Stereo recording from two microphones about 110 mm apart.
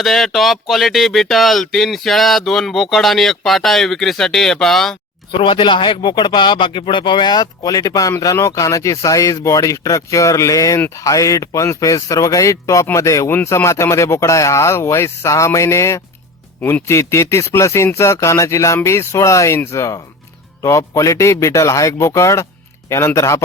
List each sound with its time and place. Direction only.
0.0 s speech: centre (ahead or behind)
5.4 s speech: 50° left (ahead or behind); by 11.0 s 20° left (ahead or behind)
11.0 s speech: 30° left (ahead or behind)